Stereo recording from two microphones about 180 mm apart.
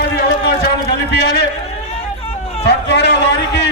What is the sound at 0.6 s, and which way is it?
Speech, 65° left (ahead or behind).